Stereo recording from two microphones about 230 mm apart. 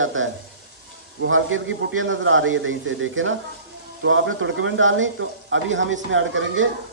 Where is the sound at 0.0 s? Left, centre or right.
Right.